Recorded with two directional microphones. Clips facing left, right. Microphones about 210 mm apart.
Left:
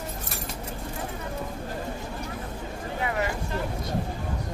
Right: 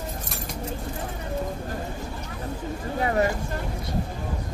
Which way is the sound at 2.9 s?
35° right (ahead or behind).